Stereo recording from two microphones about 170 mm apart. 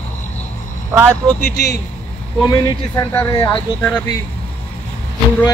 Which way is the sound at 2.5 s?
25° left (ahead or behind).